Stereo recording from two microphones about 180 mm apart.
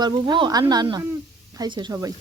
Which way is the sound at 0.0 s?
25° right (ahead or behind).